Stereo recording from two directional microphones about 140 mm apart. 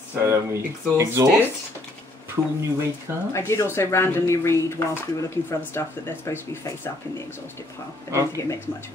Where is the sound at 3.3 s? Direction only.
20° left (ahead or behind).